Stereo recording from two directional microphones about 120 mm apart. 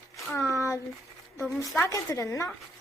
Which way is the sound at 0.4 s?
25° left (ahead or behind).